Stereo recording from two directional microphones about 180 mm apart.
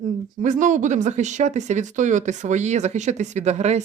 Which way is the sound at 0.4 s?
45° right (ahead or behind).